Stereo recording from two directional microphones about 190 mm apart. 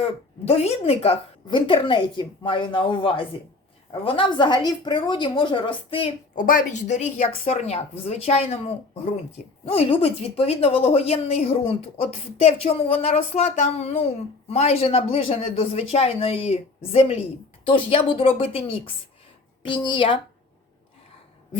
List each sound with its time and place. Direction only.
0.0 s a woman's voice: 35° left (ahead or behind)
6.3 s a woman's voice: 45° left (ahead or behind); by 20.1 s 25° left (ahead or behind)